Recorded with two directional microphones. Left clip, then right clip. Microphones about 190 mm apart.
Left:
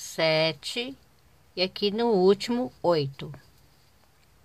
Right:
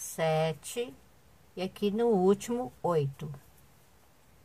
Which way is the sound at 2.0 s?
30° left (ahead or behind).